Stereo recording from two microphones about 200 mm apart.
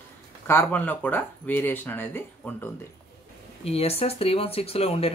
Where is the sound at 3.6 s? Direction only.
30° left (ahead or behind).